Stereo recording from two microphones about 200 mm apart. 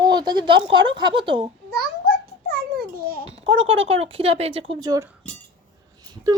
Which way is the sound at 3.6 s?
25° right (ahead or behind).